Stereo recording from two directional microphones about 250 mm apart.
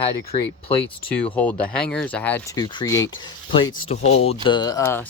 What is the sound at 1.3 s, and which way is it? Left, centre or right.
Speech, centre.